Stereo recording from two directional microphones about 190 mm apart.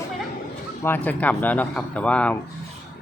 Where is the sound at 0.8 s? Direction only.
10° left (ahead or behind).